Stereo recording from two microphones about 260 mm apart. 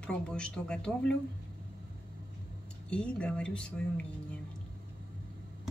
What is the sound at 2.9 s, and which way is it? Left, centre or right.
Speech, centre.